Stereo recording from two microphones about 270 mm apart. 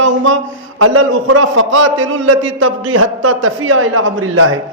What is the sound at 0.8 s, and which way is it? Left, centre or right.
A man's voice, right.